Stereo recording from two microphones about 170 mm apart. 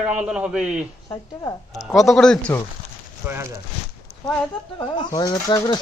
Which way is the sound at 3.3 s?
15° right (ahead or behind).